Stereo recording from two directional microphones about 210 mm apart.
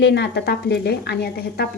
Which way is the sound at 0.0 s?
55° left (ahead or behind).